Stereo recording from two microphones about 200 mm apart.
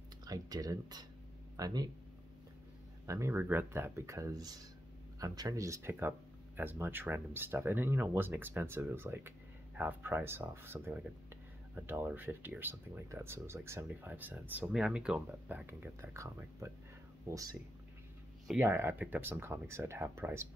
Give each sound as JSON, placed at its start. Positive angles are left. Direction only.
{"t": 0.2, "sound": "speech", "side_deg": -20}
{"t": 3.1, "sound": "speech", "side_deg": -15}
{"t": 18.6, "sound": "speech", "side_deg": -10}